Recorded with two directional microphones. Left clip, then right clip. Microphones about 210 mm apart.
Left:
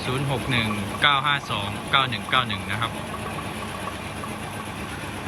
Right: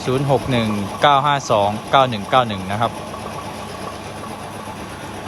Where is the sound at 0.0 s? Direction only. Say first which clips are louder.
Right 9 dB; 15° right (ahead or behind).